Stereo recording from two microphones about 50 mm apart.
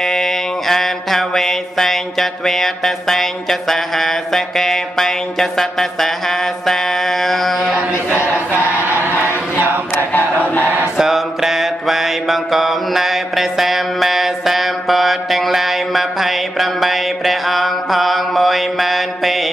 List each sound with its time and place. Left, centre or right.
0.0 s mantra: centre
10.4 s chant: left
11.0 s mantra: centre